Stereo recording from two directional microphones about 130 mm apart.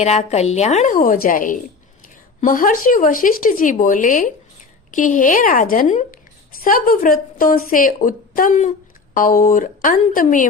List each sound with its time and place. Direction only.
0.0 s a woman's voice: 60° left (ahead or behind); by 6.1 s 80° left
6.7 s a woman's voice: 90° left
9.1 s a woman's voice: 90° left